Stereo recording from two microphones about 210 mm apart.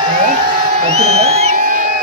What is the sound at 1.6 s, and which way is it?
Music, 40° right (ahead or behind).